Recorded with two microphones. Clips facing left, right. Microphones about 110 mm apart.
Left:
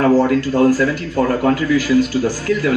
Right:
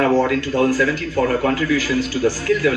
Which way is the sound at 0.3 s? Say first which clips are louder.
Left 4 dB; 45° left (ahead or behind).